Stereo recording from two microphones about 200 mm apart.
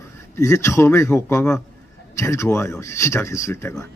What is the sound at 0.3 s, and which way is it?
Speech, 15° left (ahead or behind).